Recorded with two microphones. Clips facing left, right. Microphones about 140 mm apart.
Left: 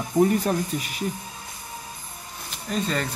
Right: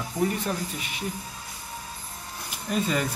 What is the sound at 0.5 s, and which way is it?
Speech, 40° left (ahead or behind).